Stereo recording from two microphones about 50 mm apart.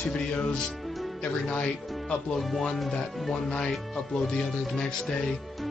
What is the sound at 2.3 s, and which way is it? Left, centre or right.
Speech, centre.